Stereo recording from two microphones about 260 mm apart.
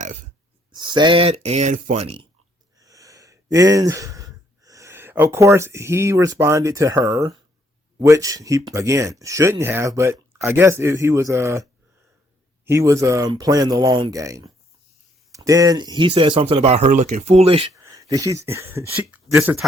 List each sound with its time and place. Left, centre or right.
0.7 s speech: centre